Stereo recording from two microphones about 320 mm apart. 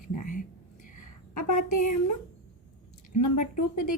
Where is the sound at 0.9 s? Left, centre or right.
Left.